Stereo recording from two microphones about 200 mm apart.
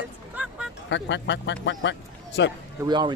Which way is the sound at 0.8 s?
65° left (ahead or behind).